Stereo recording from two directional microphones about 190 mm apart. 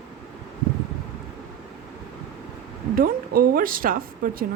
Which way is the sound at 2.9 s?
50° right (ahead or behind).